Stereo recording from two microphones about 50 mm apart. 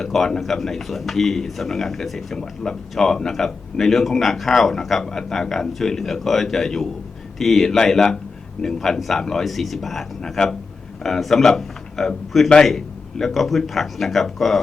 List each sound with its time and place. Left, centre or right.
0.0 s speech: centre